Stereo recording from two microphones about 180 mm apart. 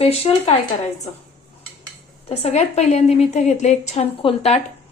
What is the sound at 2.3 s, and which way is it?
A woman's voice, 35° left (ahead or behind).